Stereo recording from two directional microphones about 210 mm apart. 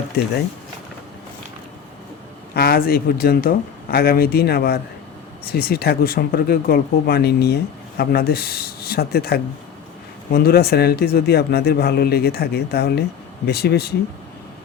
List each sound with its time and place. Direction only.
2.6 s speech: 45° left (ahead or behind)